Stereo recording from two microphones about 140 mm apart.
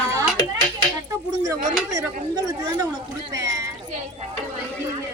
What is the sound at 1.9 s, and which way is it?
Speech, 25° right (ahead or behind).